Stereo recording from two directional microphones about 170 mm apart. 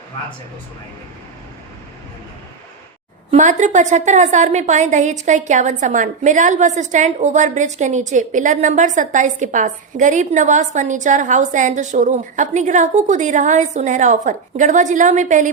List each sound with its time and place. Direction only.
3.3 s a woman's voice: 45° right (ahead or behind)